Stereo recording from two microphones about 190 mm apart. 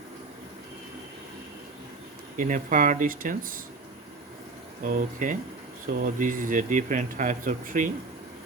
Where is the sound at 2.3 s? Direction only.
45° right (ahead or behind).